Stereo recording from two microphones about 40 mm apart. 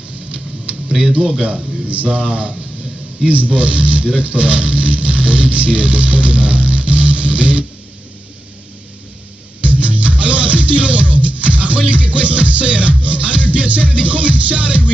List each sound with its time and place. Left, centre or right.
0.3 s a sound: right
1.4 s speech: right
9.6 s music: right